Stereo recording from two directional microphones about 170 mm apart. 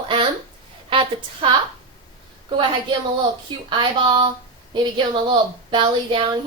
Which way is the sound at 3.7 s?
30° right (ahead or behind).